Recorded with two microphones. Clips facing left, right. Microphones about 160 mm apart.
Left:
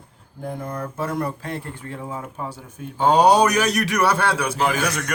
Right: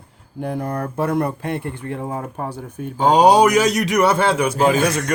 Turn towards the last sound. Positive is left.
turn(degrees=-25)  # may be behind; listen again after turning